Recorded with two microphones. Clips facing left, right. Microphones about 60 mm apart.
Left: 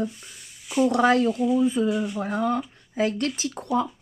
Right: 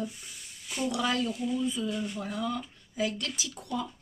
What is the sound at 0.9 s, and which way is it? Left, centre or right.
Humming, left.